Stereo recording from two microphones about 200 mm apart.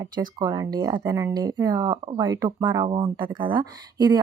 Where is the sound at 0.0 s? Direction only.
20° right (ahead or behind).